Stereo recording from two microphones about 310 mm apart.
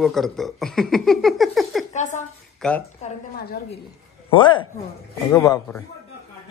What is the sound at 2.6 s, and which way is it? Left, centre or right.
Speech, centre.